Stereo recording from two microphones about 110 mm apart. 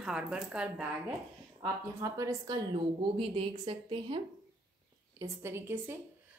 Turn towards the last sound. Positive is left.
turn(degrees=-20)  # may be behind; listen again after turning